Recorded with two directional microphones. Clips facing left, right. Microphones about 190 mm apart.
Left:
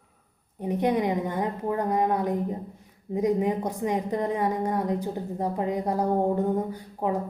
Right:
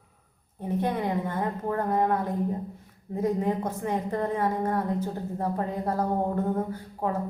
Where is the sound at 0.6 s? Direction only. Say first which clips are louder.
Left 3 dB; 15° left (ahead or behind).